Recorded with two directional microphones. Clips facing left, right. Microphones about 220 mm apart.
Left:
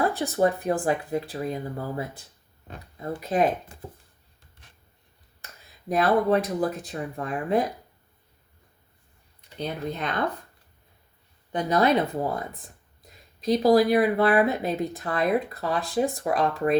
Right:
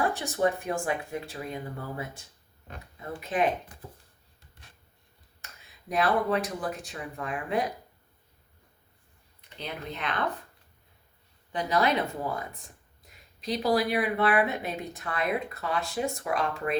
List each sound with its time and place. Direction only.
0.0 s speech: 35° left (ahead or behind)
5.9 s speech: 40° left (ahead or behind)
9.6 s speech: 40° left (ahead or behind)
11.5 s speech: 35° left (ahead or behind)